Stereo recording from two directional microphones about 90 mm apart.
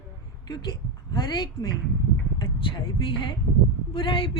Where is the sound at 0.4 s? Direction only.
50° left (ahead or behind).